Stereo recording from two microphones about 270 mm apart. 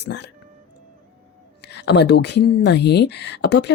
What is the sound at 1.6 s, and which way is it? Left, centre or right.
Speech, left.